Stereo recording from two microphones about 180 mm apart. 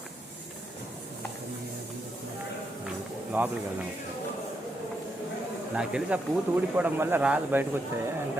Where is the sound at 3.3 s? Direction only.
10° right (ahead or behind).